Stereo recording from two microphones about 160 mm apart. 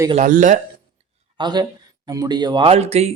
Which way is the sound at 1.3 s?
25° right (ahead or behind).